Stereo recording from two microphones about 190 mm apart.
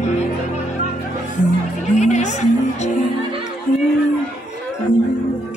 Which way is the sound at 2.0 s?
35° left (ahead or behind).